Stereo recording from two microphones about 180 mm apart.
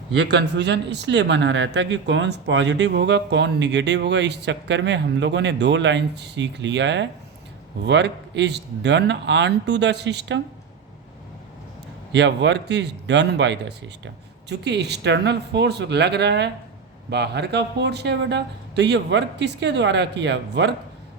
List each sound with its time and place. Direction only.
0.2 s speech: 70° right (ahead or behind)
12.1 s speech: 75° right (ahead or behind)